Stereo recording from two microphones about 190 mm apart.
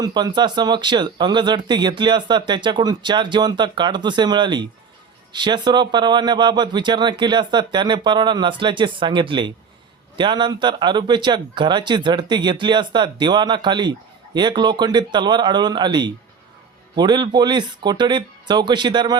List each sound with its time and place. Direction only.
0.0 s speech: 20° right (ahead or behind)